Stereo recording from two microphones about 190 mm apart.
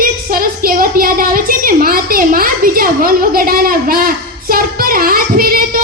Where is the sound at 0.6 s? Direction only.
50° right (ahead or behind).